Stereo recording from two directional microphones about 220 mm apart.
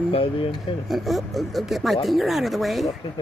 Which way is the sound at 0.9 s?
Centre (ahead or behind).